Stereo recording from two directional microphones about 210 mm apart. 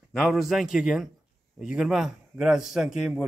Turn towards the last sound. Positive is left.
turn(degrees=0)  # may be behind; listen again after turning